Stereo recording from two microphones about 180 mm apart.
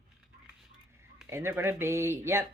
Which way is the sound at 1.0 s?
15° right (ahead or behind).